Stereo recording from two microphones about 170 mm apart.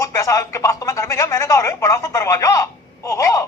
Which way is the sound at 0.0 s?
20° left (ahead or behind).